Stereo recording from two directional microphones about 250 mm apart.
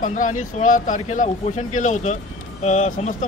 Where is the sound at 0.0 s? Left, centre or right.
Left.